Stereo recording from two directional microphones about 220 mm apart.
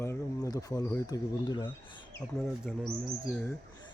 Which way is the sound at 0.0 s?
15° left (ahead or behind).